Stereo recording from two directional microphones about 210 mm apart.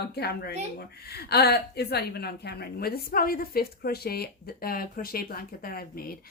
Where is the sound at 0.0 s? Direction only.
50° left (ahead or behind).